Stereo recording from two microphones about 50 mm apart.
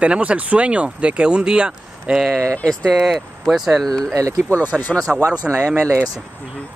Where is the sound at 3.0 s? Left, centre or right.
Centre.